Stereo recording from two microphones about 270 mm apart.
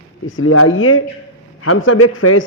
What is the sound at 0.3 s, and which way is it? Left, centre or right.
A man's voice, left.